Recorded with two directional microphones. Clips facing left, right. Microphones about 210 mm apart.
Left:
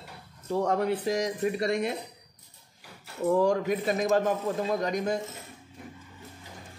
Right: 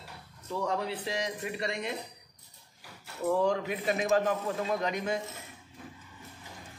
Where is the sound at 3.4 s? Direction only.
40° left (ahead or behind).